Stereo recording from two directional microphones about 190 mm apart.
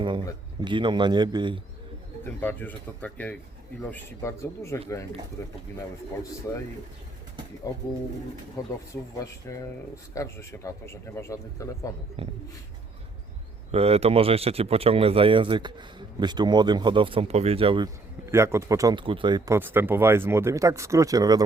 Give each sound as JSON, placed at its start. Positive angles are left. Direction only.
{"t": 0.0, "sound": "speech", "side_deg": -25}
{"t": 2.4, "sound": "a man's voice", "side_deg": 10}
{"t": 7.7, "sound": "a man's voice", "side_deg": 20}
{"t": 12.2, "sound": "speech", "side_deg": -30}
{"t": 13.7, "sound": "speech", "side_deg": -30}
{"t": 18.3, "sound": "speech", "side_deg": -15}
{"t": 19.5, "sound": "speech", "side_deg": -10}